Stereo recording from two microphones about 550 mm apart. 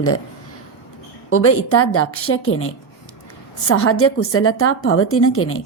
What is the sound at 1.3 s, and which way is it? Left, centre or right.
A woman's voice, left.